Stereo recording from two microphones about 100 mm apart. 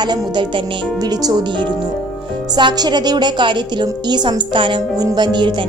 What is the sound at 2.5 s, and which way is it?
Speech, 45° right (ahead or behind).